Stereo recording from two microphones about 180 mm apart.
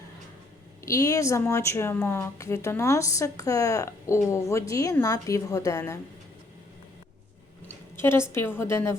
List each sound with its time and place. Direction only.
0.9 s speech: 15° left (ahead or behind)
7.9 s speech: 15° left (ahead or behind)